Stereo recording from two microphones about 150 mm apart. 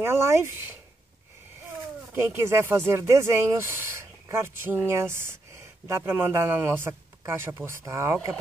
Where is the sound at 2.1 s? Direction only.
15° right (ahead or behind).